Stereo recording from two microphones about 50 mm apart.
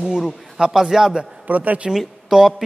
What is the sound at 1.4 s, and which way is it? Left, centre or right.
Speech, right.